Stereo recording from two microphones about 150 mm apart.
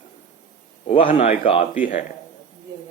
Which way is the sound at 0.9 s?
40° left (ahead or behind).